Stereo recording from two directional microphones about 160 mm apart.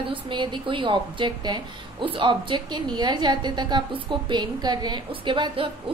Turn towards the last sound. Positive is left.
turn(degrees=-30)  # may be behind; listen again after turning